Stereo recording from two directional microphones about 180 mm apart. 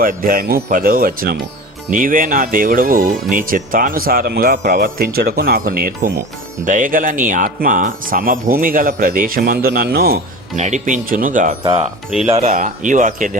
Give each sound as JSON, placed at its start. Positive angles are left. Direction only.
{"t": 0.0, "sound": "speech", "side_deg": -50}
{"t": 10.6, "sound": "speech", "side_deg": -40}